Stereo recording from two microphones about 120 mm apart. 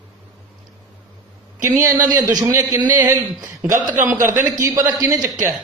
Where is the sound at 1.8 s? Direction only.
30° right (ahead or behind).